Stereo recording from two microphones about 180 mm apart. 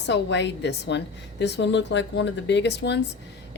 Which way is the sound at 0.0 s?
75° left (ahead or behind).